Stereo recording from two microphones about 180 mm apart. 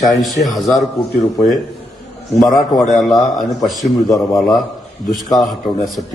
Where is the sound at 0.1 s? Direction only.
Centre (ahead or behind).